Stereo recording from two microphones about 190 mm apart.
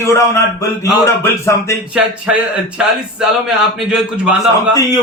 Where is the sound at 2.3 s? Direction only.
5° right (ahead or behind).